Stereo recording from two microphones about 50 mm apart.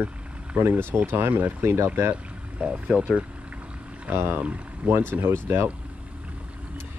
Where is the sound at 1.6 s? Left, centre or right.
Right.